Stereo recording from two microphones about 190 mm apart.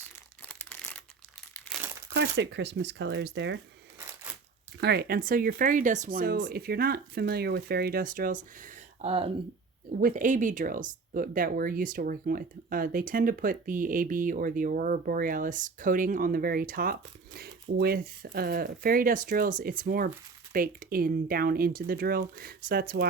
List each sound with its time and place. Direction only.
0.4 s crumpling: 10° left (ahead or behind)
2.1 s speech: 65° right (ahead or behind)
4.8 s speech: 60° right (ahead or behind); by 9.3 s 30° right (ahead or behind)
10.0 s speech: 40° right (ahead or behind)